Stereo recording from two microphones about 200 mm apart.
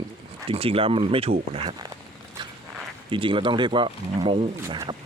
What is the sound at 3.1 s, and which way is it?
Speech, 25° right (ahead or behind).